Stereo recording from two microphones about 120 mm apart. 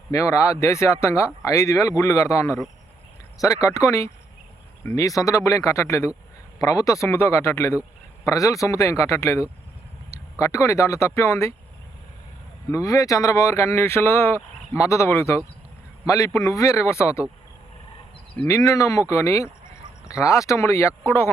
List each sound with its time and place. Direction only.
0.1 s speech: 25° left (ahead or behind)
12.7 s speech: 30° left (ahead or behind)
18.4 s speech: 25° left (ahead or behind)